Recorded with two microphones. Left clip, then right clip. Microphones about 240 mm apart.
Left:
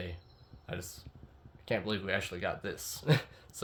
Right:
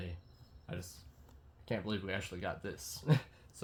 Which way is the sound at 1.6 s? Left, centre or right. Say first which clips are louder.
Left 5 dB; left.